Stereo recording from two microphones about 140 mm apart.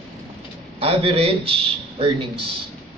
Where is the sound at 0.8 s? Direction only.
40° right (ahead or behind).